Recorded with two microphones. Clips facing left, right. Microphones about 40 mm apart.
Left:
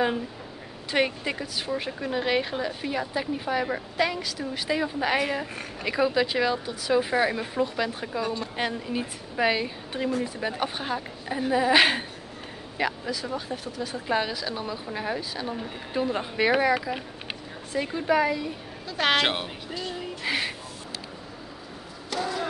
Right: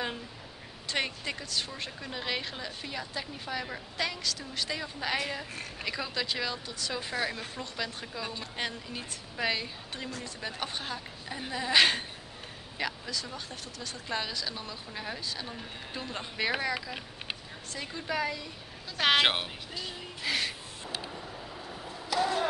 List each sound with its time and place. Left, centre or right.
0.9 s speech: centre
18.9 s speech: centre
20.2 s speech: centre